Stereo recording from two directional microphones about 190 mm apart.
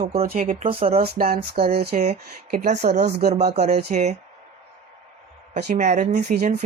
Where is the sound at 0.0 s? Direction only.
50° right (ahead or behind).